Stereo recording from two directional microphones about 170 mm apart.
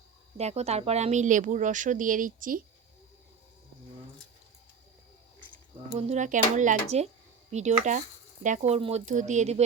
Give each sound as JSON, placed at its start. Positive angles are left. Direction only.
{"t": 0.3, "sound": "a woman's voice", "side_deg": -40}
{"t": 5.9, "sound": "a woman's voice", "side_deg": -40}